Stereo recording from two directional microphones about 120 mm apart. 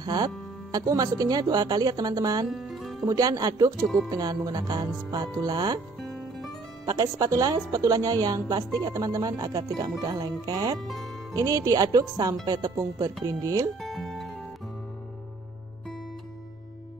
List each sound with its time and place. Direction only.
0.0 s a woman's voice: 35° right (ahead or behind)
2.4 s music: centre (ahead or behind)
3.1 s a woman's voice: 30° right (ahead or behind)
3.8 s speech: centre (ahead or behind)
4.1 s a woman's voice: 30° right (ahead or behind)
5.9 s music: centre (ahead or behind)
6.9 s a woman's voice: 30° right (ahead or behind)
13.7 s music: centre (ahead or behind)